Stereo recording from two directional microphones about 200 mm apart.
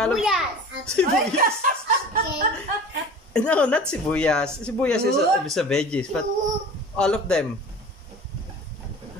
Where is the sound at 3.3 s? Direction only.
5° left (ahead or behind).